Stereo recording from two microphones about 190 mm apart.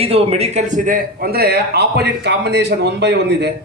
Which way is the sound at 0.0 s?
30° right (ahead or behind).